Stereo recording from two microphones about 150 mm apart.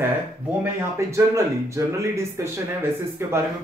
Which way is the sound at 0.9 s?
20° right (ahead or behind).